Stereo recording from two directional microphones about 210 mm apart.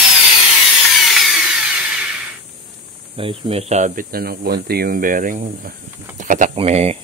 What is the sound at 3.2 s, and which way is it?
Speech, 25° right (ahead or behind).